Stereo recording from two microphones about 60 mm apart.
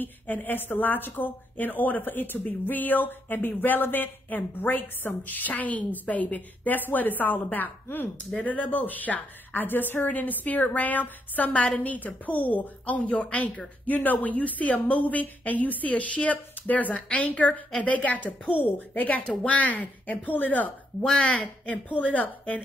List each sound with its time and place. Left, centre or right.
0.0 s a woman's voice: left
21.0 s a woman's voice: centre